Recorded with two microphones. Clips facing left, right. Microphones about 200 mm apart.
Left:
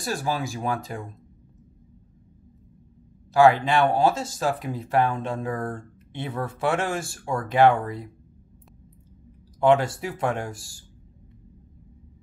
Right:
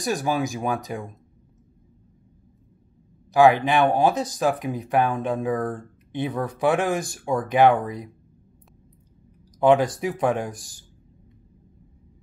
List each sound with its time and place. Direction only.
0.0 s speech: 15° right (ahead or behind)
3.3 s speech: 20° right (ahead or behind)
9.6 s speech: 20° right (ahead or behind)